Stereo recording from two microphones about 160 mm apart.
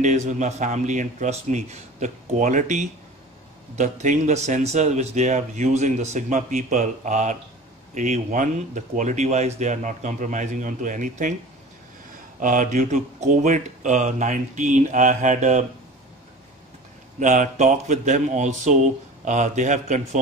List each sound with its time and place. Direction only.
0.0 s a man's voice: 50° right (ahead or behind)
12.4 s a man's voice: 55° right (ahead or behind)
17.2 s a man's voice: 50° right (ahead or behind)